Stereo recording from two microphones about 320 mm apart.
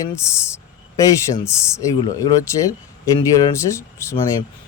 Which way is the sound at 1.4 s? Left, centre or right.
Centre.